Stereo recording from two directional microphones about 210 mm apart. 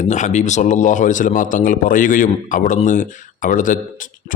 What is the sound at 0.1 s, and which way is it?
A man's voice, 35° left (ahead or behind).